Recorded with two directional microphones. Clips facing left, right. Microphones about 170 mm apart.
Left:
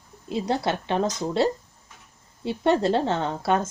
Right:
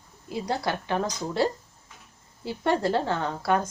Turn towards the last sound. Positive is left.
turn(degrees=20)  # may be behind; listen again after turning